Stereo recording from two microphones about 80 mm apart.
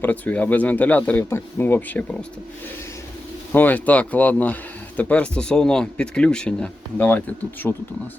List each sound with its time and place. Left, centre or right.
0.0 s speech: left
3.5 s speech: left